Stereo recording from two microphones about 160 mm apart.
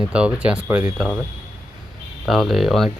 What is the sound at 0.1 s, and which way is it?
Speech, 5° right (ahead or behind).